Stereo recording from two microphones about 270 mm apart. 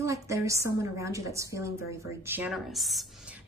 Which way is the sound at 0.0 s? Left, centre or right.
Centre.